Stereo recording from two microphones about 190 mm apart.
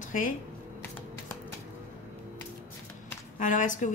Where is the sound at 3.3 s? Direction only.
40° left (ahead or behind).